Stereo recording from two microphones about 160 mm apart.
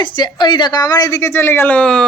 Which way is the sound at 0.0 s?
30° left (ahead or behind).